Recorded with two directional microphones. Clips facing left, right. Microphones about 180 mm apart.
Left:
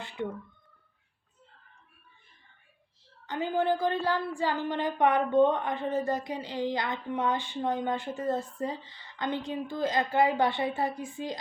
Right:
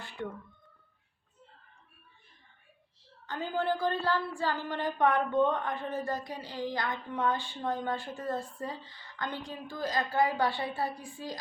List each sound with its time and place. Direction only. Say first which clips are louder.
0.2 s a woman's voice: left 4 dB; 20° left (ahead or behind)
3.2 s a woman's voice: left 4 dB; 20° left (ahead or behind)